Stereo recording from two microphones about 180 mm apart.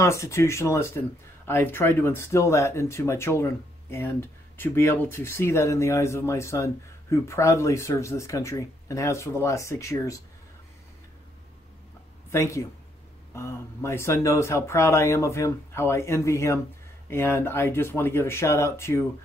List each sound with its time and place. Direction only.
0.0 s speech: 15° left (ahead or behind)
12.3 s speech: 15° left (ahead or behind)